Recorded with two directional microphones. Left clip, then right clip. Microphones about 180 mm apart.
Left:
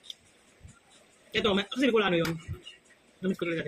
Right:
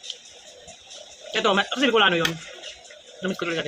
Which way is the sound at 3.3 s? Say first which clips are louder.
Right 6 dB; 20° left (ahead or behind).